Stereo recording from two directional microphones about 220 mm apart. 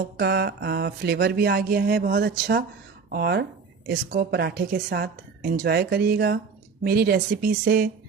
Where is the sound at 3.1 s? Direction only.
45° right (ahead or behind).